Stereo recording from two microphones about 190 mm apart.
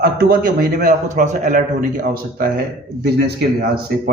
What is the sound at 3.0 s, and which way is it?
Speech, 60° right (ahead or behind).